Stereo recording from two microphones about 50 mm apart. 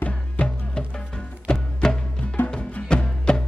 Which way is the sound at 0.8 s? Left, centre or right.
Centre.